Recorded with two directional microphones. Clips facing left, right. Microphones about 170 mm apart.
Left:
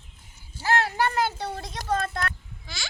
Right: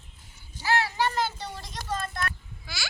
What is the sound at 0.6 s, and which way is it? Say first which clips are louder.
A child's voice: left 2 dB; 55° left (ahead or behind).